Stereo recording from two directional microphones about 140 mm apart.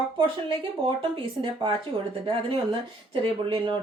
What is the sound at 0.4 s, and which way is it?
A woman's voice, 35° right (ahead or behind).